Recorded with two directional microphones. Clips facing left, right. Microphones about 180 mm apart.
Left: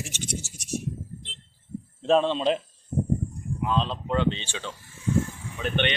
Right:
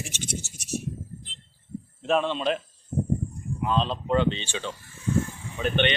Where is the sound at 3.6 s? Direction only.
Centre (ahead or behind).